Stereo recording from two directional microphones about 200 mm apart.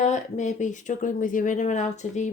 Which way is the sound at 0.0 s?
35° left (ahead or behind).